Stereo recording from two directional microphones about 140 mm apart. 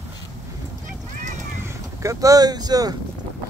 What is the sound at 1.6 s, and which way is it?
Speech, 20° right (ahead or behind).